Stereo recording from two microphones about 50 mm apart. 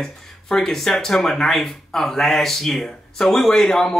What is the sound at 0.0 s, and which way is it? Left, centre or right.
Speech, centre.